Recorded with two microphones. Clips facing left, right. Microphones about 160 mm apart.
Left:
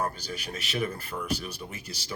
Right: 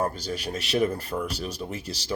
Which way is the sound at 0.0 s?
30° right (ahead or behind).